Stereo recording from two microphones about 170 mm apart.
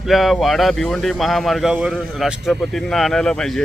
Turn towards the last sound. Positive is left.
turn(degrees=5)  # may be behind; listen again after turning